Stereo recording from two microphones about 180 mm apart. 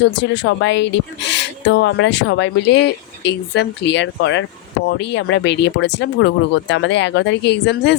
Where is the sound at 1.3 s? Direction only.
80° left.